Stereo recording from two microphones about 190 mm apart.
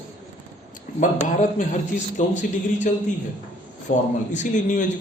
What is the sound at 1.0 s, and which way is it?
A man's voice, 40° left (ahead or behind).